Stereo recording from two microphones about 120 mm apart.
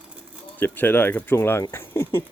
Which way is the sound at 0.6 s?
15° left (ahead or behind).